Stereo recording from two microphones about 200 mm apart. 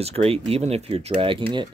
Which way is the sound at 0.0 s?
30° right (ahead or behind).